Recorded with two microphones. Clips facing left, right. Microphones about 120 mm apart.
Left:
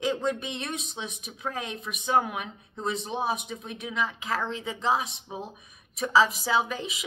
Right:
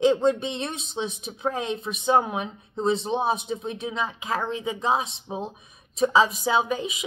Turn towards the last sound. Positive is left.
turn(degrees=-20)  # may be behind; listen again after turning